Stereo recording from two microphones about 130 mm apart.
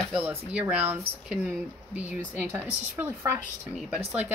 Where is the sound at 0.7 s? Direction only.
15° right (ahead or behind).